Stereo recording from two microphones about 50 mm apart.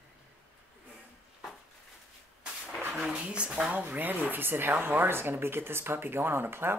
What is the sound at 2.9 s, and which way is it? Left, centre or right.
Speech, centre.